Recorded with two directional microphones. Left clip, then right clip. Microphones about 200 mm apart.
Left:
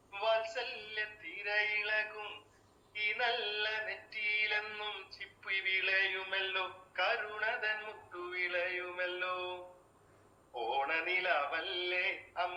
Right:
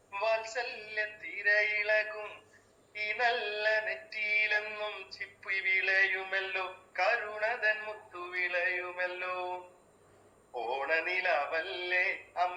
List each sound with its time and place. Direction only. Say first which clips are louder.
0.2 s music: right 2 dB; 20° right (ahead or behind)
10.5 s music: right 3 dB; 20° right (ahead or behind)